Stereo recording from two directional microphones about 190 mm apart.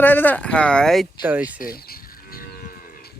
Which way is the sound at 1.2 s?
10° right (ahead or behind).